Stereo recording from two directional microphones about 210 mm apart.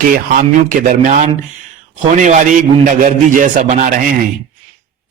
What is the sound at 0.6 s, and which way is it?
A man's voice, 40° right (ahead or behind).